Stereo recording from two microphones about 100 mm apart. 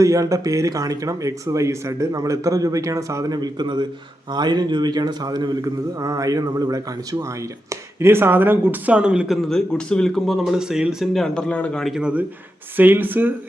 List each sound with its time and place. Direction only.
0.0 s speech: 30° right (ahead or behind)
3.3 s a man's voice: 45° right (ahead or behind)
7.7 s speech: 25° right (ahead or behind); by 11.9 s 5° left (ahead or behind)
11.9 s a man's voice: 10° right (ahead or behind)